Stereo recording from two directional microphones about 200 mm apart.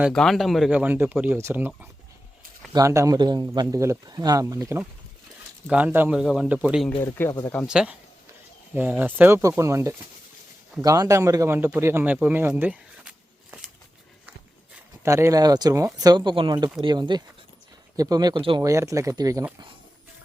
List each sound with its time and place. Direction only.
0.0 s speech: centre (ahead or behind)
7.0 s speech: 10° left (ahead or behind)
7.7 s speech: 5° right (ahead or behind)
15.0 s speech: 15° right (ahead or behind)